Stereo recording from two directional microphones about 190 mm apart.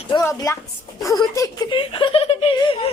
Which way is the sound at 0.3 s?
15° left (ahead or behind).